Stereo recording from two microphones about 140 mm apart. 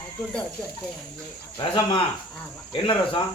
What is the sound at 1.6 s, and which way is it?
Speech, 35° left (ahead or behind).